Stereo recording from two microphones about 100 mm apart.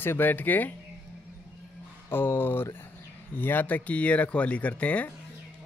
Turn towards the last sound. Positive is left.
turn(degrees=15)  # may be behind; listen again after turning